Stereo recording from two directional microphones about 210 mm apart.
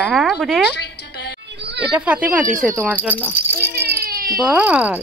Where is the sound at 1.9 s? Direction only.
5° right (ahead or behind).